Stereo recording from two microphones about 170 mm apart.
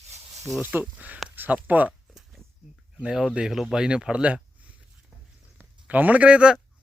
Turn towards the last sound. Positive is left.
turn(degrees=-5)  # may be behind; listen again after turning